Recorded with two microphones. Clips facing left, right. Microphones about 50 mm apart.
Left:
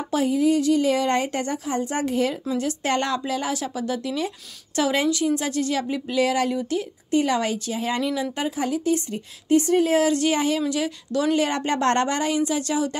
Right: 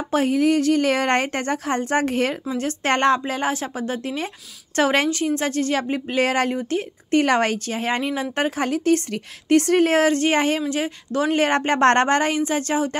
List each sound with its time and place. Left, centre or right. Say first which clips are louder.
0.1 s a woman's voice: right 2 dB; right
8.4 s a woman's voice: right 3 dB; right